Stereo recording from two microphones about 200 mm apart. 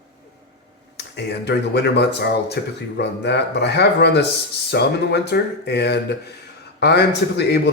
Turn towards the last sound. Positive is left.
turn(degrees=55)  # may be behind; listen again after turning